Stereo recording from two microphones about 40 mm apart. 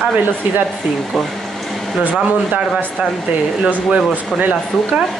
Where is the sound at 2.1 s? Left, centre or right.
Right.